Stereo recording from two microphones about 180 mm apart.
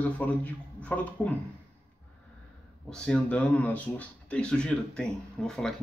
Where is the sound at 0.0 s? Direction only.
10° left (ahead or behind).